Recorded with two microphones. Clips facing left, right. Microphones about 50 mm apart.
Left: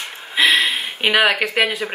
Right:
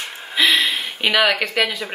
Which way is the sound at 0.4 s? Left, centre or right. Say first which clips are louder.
Left 1 dB; left.